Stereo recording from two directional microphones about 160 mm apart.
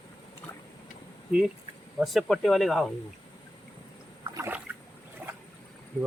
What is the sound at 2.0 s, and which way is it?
Speech, centre (ahead or behind).